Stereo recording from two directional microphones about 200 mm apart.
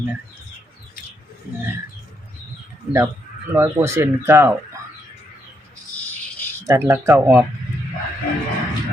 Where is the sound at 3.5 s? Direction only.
10° right (ahead or behind).